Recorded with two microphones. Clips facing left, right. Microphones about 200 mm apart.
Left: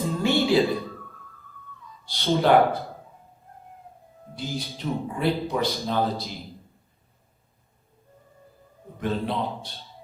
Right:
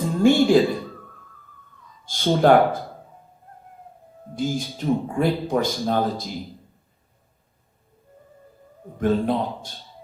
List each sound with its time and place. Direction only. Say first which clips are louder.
0.0 s a sound: right 6 dB; 45° right (ahead or behind)
2.0 s a man's voice: right 4 dB; 45° right (ahead or behind)
4.4 s a man's voice: right 7 dB; 45° right (ahead or behind)
9.0 s a man's voice: right 6 dB; 45° right (ahead or behind)